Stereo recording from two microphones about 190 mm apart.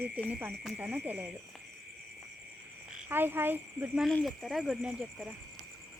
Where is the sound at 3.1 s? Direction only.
10° right (ahead or behind).